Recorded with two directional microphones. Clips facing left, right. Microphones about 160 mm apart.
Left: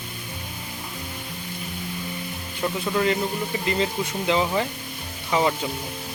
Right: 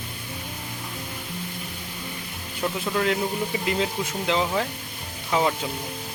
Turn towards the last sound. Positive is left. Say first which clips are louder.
# left 1 dB
turn(degrees=0)  # may be behind; listen again after turning